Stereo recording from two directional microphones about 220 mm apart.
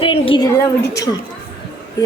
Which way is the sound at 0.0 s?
25° left (ahead or behind).